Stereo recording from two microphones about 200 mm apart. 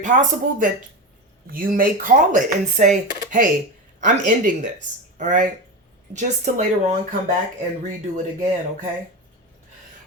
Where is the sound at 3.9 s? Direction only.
40° right (ahead or behind).